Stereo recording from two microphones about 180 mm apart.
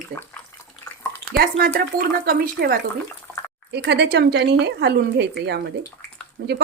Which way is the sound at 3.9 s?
70° right (ahead or behind).